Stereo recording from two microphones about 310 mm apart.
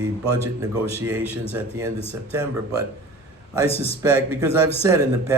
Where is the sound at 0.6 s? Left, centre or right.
Centre.